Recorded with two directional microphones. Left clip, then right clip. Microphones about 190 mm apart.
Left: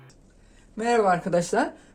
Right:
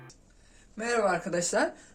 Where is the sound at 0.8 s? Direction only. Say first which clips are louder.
Left 6 dB; 40° left (ahead or behind).